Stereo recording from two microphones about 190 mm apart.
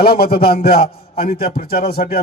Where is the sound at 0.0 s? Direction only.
55° left (ahead or behind).